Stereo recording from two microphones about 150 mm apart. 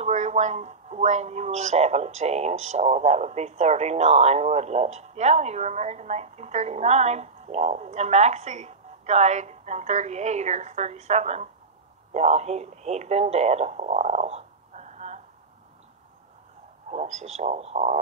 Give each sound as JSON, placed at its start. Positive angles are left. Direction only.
{"t": 0.0, "sound": "a man's voice", "side_deg": -50}
{"t": 16.9, "sound": "a man's voice", "side_deg": -50}